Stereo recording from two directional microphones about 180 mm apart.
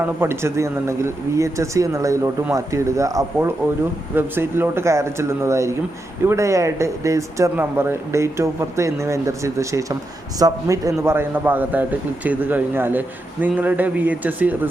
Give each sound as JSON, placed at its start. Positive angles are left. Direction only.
{"t": 0.0, "sound": "a man's voice", "side_deg": -15}